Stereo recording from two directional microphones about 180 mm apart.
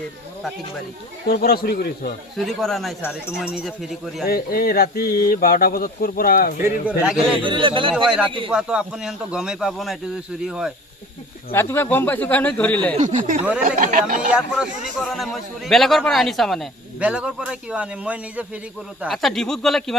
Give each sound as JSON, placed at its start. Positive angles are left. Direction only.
{"t": 1.3, "sound": "speech", "side_deg": 60}
{"t": 2.4, "sound": "a man's voice", "side_deg": 0}
{"t": 4.3, "sound": "speech", "side_deg": 55}
{"t": 7.3, "sound": "a man's voice", "side_deg": -30}
{"t": 7.9, "sound": "a man's voice", "side_deg": -5}
{"t": 8.3, "sound": "a man's voice", "side_deg": -30}
{"t": 8.5, "sound": "a man's voice", "side_deg": -5}
{"t": 11.5, "sound": "speech", "side_deg": 15}
{"t": 13.0, "sound": "speech", "side_deg": -45}
{"t": 14.2, "sound": "a man's voice", "side_deg": -5}